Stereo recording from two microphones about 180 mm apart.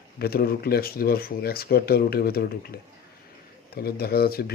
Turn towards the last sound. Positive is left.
turn(degrees=60)  # may be behind; listen again after turning